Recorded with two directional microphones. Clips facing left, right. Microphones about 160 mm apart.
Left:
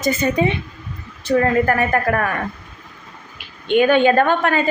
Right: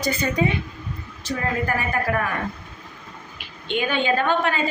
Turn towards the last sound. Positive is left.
turn(degrees=55)  # may be behind; listen again after turning